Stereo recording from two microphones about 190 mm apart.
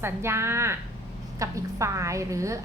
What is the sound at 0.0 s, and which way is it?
A woman's voice, 15° right (ahead or behind).